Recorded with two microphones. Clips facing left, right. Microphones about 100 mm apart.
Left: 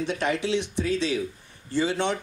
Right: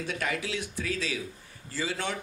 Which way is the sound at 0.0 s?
25° left (ahead or behind).